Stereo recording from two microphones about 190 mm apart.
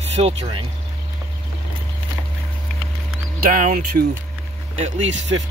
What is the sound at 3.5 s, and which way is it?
Speech, 45° right (ahead or behind).